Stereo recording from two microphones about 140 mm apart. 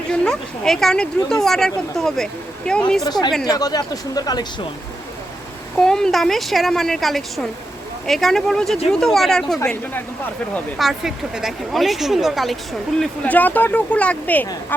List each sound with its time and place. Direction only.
0.1 s speech: 5° left (ahead or behind)
3.0 s speech: 30° left (ahead or behind)
5.7 s speech: 5° left (ahead or behind)
10.8 s speech: centre (ahead or behind)
13.0 s speech: 10° left (ahead or behind)